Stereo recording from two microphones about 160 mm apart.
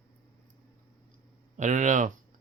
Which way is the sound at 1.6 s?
50° right (ahead or behind).